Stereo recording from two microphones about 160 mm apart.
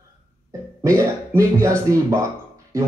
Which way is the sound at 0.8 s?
20° right (ahead or behind).